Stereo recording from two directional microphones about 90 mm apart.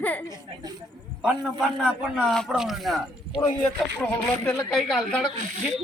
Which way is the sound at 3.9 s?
10° left (ahead or behind).